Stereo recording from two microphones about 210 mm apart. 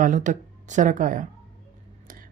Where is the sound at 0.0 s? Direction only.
35° right (ahead or behind).